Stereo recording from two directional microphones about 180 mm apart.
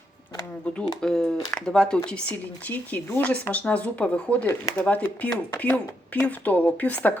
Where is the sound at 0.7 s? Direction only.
5° left (ahead or behind).